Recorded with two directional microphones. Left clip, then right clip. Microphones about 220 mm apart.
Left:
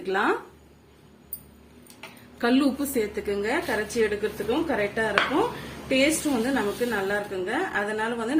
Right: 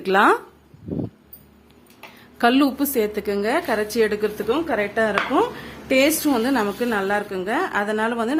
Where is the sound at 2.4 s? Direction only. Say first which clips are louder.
Right 6 dB; 45° right (ahead or behind).